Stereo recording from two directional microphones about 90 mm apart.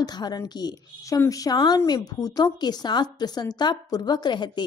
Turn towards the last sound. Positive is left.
turn(degrees=55)  # may be behind; listen again after turning